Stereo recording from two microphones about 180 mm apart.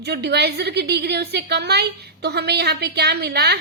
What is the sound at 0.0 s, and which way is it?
A woman's voice, 70° right (ahead or behind).